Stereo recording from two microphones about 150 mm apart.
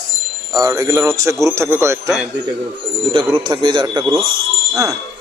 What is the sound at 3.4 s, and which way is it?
A man's voice, 30° right (ahead or behind).